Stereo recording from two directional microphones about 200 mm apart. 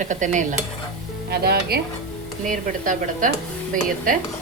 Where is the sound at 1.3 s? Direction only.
50° right (ahead or behind).